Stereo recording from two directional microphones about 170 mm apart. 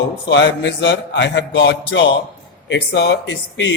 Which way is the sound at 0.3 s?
90° left.